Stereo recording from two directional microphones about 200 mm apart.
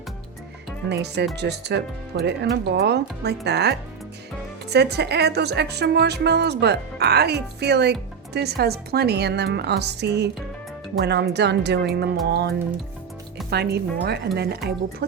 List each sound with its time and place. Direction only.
0.9 s a woman's voice: 55° right (ahead or behind)